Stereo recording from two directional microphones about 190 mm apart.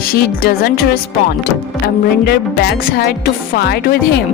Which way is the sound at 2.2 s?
55° left (ahead or behind).